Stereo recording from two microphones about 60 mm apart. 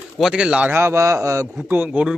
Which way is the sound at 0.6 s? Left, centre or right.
Right.